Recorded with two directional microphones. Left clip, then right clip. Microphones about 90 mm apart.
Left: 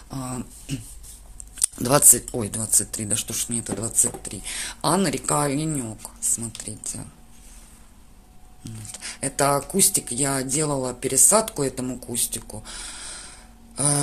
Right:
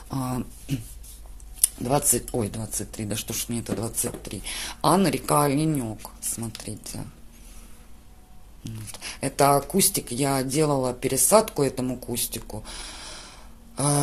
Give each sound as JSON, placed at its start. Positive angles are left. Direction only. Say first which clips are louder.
{"t": 0.1, "sound": "speech", "louder": "right 3 dB", "side_deg": -45}
{"t": 1.6, "sound": "a sound", "louder": "left 3 dB", "side_deg": 60}
{"t": 2.1, "sound": "speech", "louder": "right 1 dB", "side_deg": 0}
{"t": 3.3, "sound": "speech", "louder": "left 1 dB", "side_deg": -20}
{"t": 8.6, "sound": "speech", "louder": "even", "side_deg": -25}